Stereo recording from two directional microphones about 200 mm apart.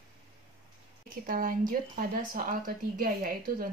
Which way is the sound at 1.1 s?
45° right (ahead or behind).